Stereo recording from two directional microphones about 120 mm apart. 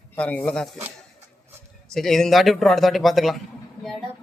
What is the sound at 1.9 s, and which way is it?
Speech, 5° left (ahead or behind).